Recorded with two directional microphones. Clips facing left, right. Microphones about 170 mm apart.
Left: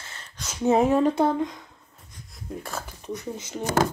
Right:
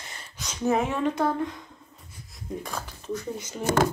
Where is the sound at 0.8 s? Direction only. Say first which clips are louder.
Left 5 dB; 35° left (ahead or behind).